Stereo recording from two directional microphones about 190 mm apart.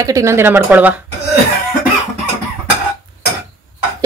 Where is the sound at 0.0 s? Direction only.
15° right (ahead or behind).